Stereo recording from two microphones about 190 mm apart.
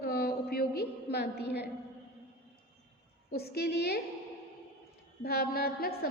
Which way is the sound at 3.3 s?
55° left (ahead or behind).